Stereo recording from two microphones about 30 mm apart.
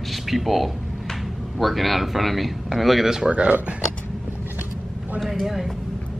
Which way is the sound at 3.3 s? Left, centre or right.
Right.